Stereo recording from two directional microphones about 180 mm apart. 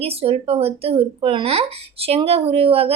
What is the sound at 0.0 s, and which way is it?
Speech, 35° right (ahead or behind).